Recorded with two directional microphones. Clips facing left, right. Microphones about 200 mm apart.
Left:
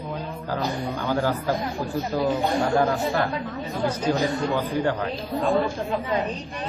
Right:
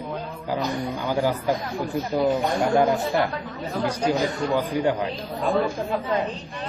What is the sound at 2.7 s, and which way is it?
Speech, 15° right (ahead or behind).